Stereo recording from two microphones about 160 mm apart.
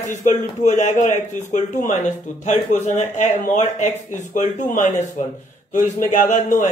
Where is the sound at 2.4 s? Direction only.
50° left (ahead or behind).